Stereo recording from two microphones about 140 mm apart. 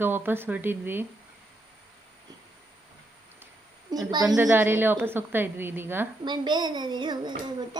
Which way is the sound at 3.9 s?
30° right (ahead or behind).